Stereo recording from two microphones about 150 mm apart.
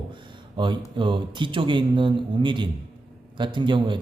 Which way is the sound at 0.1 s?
30° right (ahead or behind).